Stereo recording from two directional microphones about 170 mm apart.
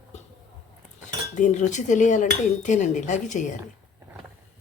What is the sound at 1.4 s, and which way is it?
Speech, 45° left (ahead or behind).